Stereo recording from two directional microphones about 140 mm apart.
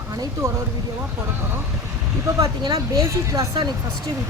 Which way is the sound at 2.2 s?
30° right (ahead or behind).